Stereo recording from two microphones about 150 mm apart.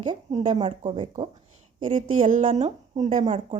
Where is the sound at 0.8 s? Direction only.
35° right (ahead or behind).